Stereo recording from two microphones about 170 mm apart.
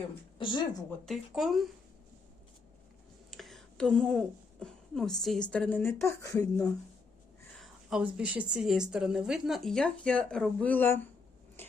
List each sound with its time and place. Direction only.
0.3 s speech: 30° left (ahead or behind)
1.0 s speech: centre (ahead or behind)
3.2 s speech: centre (ahead or behind); by 6.7 s 20° left (ahead or behind)
7.5 s speech: centre (ahead or behind)